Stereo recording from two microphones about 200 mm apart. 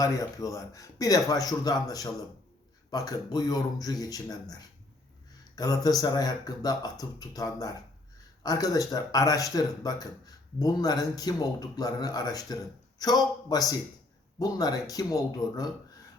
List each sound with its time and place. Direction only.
0.0 s speech: 15° left (ahead or behind)